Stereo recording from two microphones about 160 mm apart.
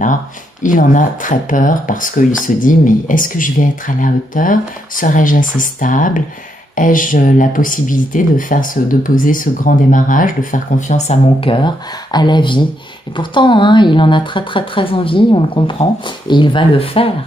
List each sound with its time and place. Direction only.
0.0 s speech: 55° left (ahead or behind); by 17.1 s 35° left (ahead or behind)